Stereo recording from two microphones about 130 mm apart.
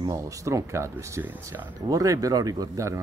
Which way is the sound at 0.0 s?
25° right (ahead or behind).